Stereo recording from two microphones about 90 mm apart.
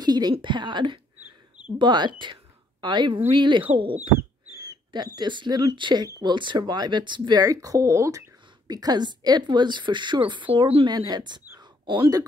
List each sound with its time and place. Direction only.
0.0 s a woman's voice: 50° right (ahead or behind); by 3.6 s 65° right (ahead or behind)
4.6 s speech: 50° right (ahead or behind)
6.0 s speech: 40° right (ahead or behind)
6.3 s a woman's voice: 60° right (ahead or behind)
7.4 s speech: 40° right (ahead or behind)
8.6 s a woman's voice: 45° right (ahead or behind); by 10.9 s 75° right (ahead or behind)
10.9 s speech: 50° right (ahead or behind)
11.8 s speech: 65° right (ahead or behind)